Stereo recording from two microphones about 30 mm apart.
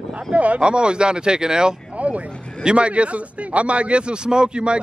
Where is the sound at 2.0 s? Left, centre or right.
Right.